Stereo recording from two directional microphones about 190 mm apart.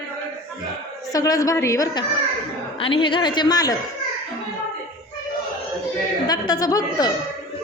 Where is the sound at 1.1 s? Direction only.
20° left (ahead or behind).